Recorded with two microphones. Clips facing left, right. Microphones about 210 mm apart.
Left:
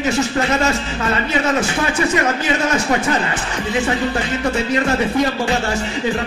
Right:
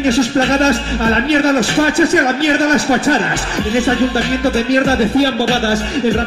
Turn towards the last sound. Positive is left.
turn(degrees=-35)  # may be behind; listen again after turning